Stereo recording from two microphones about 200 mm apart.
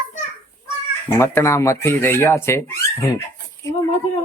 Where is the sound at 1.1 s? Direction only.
10° left (ahead or behind).